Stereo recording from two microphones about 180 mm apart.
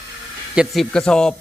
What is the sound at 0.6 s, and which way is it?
Speech, centre (ahead or behind).